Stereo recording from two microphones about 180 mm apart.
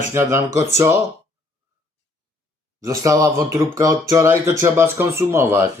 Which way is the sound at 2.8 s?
20° right (ahead or behind).